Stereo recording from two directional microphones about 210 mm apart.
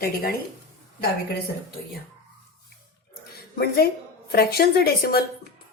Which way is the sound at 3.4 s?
50° left (ahead or behind).